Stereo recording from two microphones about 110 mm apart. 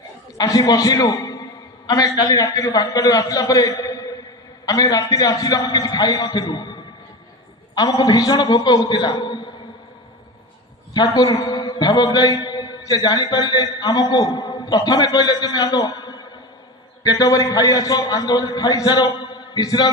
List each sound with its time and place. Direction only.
0.3 s a man's voice: 35° left (ahead or behind)
7.8 s a man's voice: 35° left (ahead or behind)
9.1 s a sound: 45° left (ahead or behind)
10.9 s a man's voice: 35° left (ahead or behind)